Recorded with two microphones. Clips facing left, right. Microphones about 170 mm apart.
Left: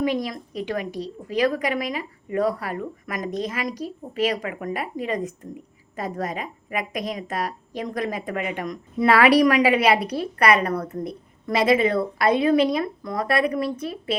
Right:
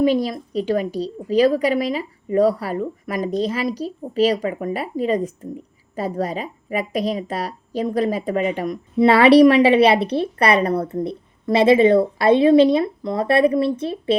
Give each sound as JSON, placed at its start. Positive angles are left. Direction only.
{"t": 0.0, "sound": "a woman's voice", "side_deg": -30}